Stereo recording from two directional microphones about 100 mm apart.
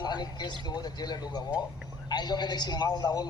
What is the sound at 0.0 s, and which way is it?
A man's voice, 45° left (ahead or behind).